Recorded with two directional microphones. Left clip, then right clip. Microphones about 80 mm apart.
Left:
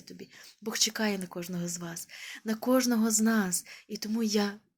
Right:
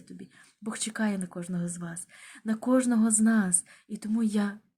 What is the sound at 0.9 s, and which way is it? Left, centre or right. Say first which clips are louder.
Speech: left 1 dB; right.